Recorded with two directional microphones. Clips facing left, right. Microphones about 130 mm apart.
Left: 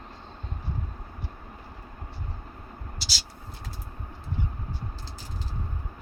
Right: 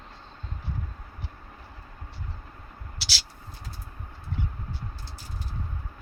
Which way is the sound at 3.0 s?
75° right (ahead or behind).